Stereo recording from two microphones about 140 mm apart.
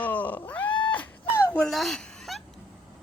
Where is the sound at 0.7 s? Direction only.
35° left (ahead or behind).